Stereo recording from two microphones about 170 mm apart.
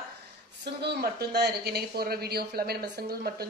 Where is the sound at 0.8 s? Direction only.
75° right (ahead or behind).